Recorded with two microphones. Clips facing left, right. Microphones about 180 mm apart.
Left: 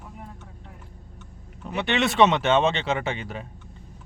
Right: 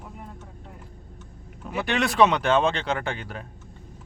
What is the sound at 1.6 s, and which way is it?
Speech, centre (ahead or behind).